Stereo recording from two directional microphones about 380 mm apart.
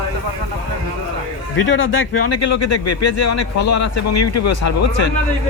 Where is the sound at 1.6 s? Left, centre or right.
Left.